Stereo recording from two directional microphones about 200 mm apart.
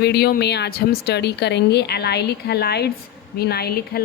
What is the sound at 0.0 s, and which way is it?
A woman's voice, 55° left (ahead or behind).